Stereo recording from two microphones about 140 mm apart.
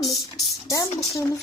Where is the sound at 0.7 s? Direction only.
25° left (ahead or behind).